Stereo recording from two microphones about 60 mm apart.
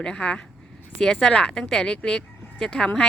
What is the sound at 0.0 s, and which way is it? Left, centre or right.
Speech, centre.